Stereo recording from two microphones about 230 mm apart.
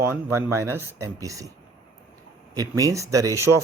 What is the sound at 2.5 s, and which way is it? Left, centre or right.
Speech, centre.